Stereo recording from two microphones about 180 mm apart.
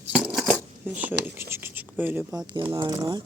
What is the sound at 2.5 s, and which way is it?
Speech, 25° right (ahead or behind).